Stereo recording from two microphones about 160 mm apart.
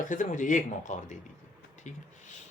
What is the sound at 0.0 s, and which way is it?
Speech, 55° left (ahead or behind).